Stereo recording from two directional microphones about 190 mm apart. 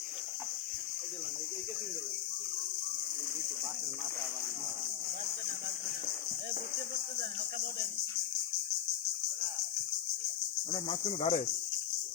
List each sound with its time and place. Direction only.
10.7 s cricket: 30° left (ahead or behind)